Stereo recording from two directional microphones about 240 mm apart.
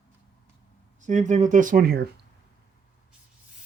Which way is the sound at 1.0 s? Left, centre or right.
Right.